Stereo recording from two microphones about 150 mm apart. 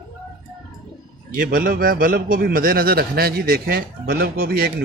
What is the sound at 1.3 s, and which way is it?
A man's voice, 70° right (ahead or behind).